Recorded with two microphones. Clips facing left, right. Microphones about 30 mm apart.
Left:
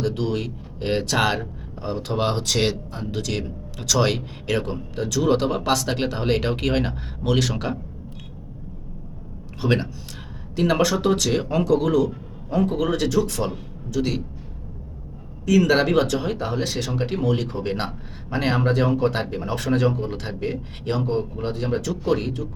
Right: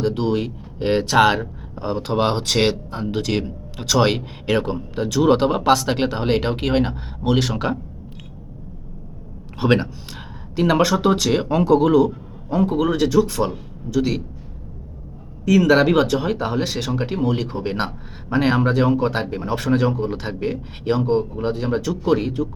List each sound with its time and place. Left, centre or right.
0.0 s speech: centre
9.6 s a man's voice: right
11.0 s a man's voice: centre
12.6 s speech: centre
15.4 s speech: centre
19.5 s speech: centre